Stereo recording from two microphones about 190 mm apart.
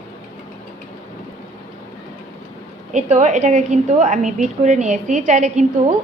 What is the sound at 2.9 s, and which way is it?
A woman's voice, 40° right (ahead or behind).